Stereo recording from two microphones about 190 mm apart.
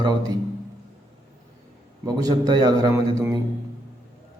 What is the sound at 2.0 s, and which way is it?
A man's voice, 20° right (ahead or behind).